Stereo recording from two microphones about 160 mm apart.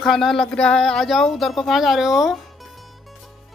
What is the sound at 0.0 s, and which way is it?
Speech, centre (ahead or behind).